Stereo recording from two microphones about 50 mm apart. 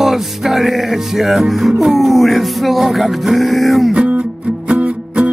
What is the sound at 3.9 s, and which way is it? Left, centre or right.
Music, right.